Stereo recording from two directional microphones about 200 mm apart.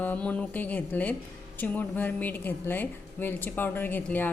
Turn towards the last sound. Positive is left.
turn(degrees=10)  # may be behind; listen again after turning